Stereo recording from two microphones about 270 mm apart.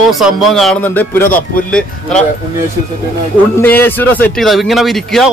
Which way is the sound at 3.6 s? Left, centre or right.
Centre.